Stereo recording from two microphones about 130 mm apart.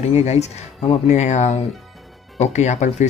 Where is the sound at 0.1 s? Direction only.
55° left (ahead or behind).